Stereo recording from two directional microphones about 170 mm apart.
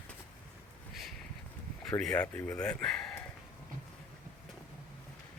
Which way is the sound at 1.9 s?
5° left (ahead or behind).